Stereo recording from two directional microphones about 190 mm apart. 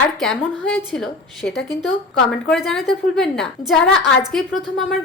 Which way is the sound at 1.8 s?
Centre (ahead or behind).